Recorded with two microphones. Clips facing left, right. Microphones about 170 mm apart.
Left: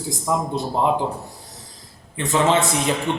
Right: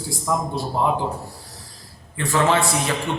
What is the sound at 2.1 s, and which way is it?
Speech, 20° left (ahead or behind).